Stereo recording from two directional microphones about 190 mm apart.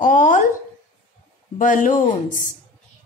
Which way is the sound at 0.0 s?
45° left (ahead or behind).